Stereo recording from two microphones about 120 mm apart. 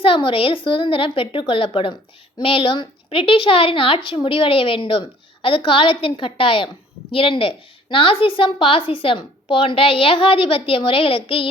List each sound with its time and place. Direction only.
0.0 s a woman's voice: 50° left (ahead or behind)